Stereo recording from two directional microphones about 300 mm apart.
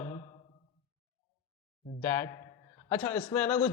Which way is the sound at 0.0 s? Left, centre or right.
Centre.